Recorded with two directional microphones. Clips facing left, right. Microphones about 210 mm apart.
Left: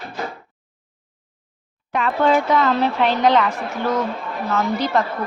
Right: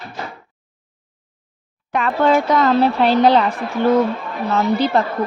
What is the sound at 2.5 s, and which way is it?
A woman's voice, 40° right (ahead or behind).